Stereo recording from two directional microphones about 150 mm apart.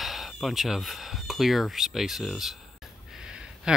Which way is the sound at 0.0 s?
Centre (ahead or behind).